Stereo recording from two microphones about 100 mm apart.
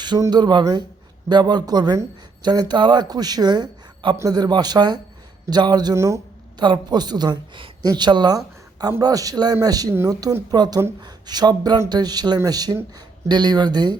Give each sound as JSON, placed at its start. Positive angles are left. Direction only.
{"t": 0.3, "sound": "speech", "side_deg": -45}
{"t": 5.9, "sound": "speech", "side_deg": -30}
{"t": 6.6, "sound": "speech", "side_deg": -45}